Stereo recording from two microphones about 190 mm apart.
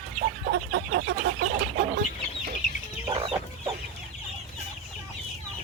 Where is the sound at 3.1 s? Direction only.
30° right (ahead or behind).